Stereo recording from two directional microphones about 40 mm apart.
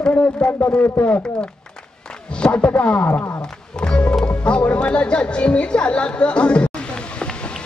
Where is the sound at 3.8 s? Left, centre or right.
Left.